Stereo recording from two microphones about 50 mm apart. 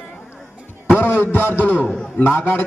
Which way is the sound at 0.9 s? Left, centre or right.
Left.